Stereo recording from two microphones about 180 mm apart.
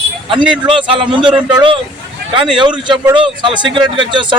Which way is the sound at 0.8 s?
25° right (ahead or behind).